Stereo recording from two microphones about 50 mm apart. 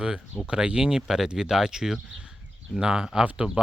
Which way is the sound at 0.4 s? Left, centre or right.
Centre.